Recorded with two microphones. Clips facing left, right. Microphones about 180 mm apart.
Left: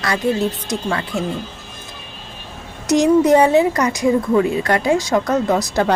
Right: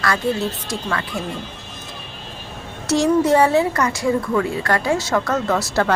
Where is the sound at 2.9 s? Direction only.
20° left (ahead or behind).